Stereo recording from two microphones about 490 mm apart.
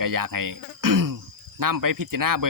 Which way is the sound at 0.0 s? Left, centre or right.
Right.